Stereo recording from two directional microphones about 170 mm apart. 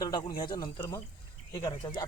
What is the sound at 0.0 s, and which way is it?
A man's voice, 25° left (ahead or behind).